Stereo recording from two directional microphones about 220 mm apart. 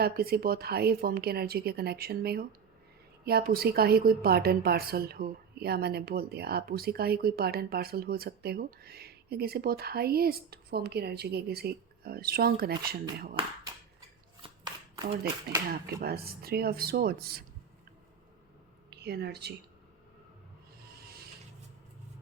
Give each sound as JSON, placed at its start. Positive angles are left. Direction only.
{"t": 0.0, "sound": "a woman's voice", "side_deg": -45}
{"t": 14.4, "sound": "shuffling cards", "side_deg": -20}
{"t": 15.7, "sound": "a woman's voice", "side_deg": -45}
{"t": 18.9, "sound": "speech", "side_deg": -45}